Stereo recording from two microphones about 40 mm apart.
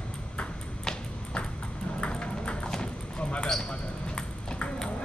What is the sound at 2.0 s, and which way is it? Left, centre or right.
Ping, left.